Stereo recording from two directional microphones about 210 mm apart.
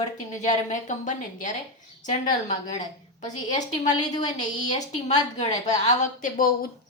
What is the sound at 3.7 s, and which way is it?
A woman's voice, 35° left (ahead or behind).